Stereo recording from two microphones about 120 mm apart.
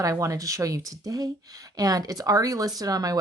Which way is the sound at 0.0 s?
25° right (ahead or behind).